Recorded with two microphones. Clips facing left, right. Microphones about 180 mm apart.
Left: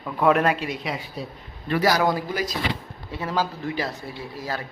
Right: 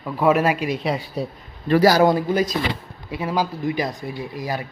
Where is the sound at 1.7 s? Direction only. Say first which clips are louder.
Right 6 dB; 35° right (ahead or behind).